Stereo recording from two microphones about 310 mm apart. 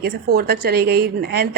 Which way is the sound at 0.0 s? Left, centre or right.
Right.